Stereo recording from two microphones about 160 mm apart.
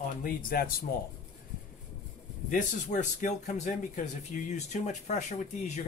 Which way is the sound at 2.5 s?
55° left (ahead or behind).